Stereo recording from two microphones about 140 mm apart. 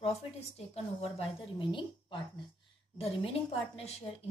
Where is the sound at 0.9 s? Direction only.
40° left (ahead or behind).